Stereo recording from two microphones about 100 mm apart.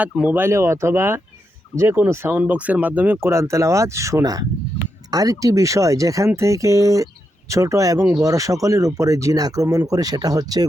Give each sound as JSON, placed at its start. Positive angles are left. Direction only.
{"t": 0.0, "sound": "speech", "side_deg": -15}
{"t": 2.3, "sound": "speech", "side_deg": -15}